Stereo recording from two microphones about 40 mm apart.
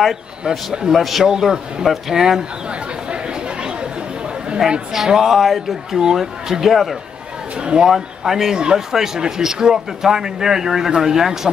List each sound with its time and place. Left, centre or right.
0.5 s speech: centre
3.1 s chatter: right
4.6 s speech: centre
7.5 s speech: right
7.9 s speech: centre